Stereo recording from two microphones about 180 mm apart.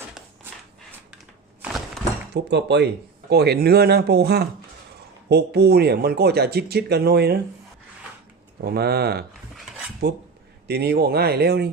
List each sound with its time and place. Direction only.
2.3 s speech: 70° right (ahead or behind)
8.6 s speech: 60° right (ahead or behind)